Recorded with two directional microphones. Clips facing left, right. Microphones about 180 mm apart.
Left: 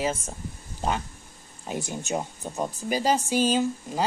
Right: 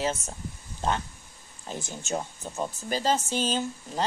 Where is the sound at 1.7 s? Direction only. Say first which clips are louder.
Left 3 dB; 15° left (ahead or behind).